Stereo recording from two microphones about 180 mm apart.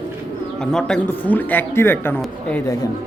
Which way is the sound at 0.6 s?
5° left (ahead or behind).